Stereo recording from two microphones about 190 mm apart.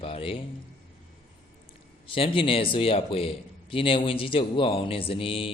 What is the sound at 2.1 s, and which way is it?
A man's voice, 30° left (ahead or behind).